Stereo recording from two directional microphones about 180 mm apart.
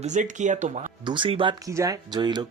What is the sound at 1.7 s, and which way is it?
Speech, 20° right (ahead or behind).